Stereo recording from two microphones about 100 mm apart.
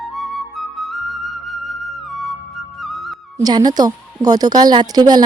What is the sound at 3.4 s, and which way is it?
Speech, 40° right (ahead or behind).